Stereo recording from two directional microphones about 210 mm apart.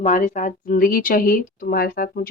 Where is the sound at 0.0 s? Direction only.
35° left (ahead or behind).